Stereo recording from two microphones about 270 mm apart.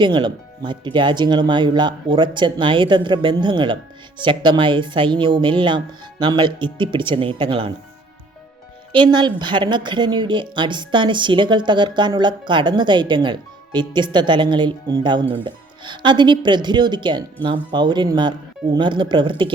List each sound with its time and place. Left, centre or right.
0.0 s speech: centre
8.9 s speech: centre